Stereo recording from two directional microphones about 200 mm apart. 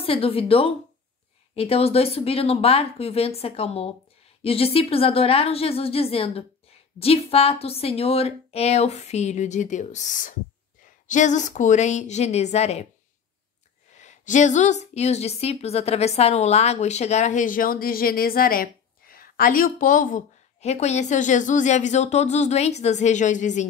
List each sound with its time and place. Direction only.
0.0 s a woman's voice: 30° left (ahead or behind)
13.9 s a woman's voice: 35° left (ahead or behind)